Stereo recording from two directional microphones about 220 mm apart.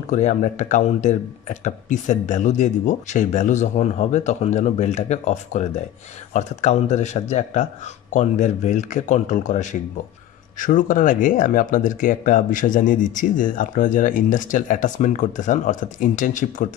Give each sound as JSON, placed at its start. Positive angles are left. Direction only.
{"t": 0.1, "sound": "speech", "side_deg": 35}